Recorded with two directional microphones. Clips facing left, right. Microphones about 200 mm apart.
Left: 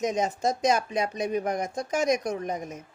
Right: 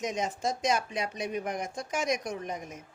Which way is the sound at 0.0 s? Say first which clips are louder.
Left 5 dB; 40° left (ahead or behind).